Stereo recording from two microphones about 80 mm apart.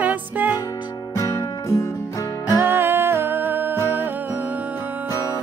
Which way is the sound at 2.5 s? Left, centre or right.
Right.